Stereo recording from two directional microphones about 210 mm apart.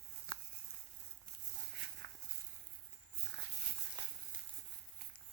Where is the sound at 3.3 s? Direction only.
60° right (ahead or behind).